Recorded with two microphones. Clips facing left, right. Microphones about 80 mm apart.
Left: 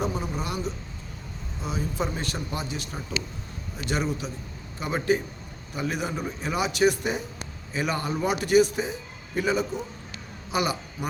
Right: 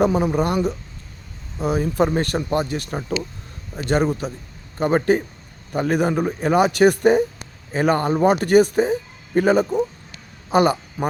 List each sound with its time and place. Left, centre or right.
0.0 s a man's voice: right